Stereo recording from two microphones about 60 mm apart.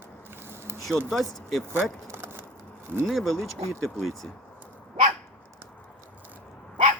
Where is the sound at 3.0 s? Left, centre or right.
Centre.